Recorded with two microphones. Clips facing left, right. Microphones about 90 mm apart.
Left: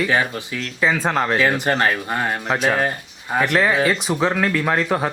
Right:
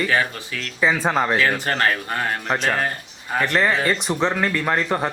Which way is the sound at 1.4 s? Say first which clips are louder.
Left 2 dB; 15° left (ahead or behind).